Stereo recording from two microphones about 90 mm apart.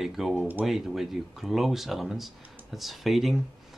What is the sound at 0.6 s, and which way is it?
Speech, centre (ahead or behind).